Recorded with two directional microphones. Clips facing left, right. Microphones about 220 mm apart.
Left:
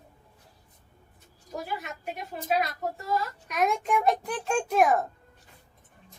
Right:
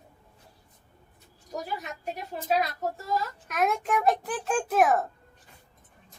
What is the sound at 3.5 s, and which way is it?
A child's voice, centre (ahead or behind).